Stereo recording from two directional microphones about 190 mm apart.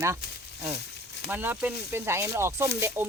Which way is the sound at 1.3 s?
10° right (ahead or behind).